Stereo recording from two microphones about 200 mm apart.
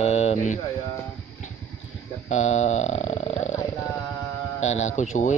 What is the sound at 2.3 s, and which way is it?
Speech, 35° left (ahead or behind).